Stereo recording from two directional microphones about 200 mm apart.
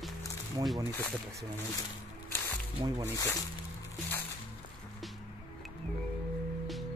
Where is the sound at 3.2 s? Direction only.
20° left (ahead or behind).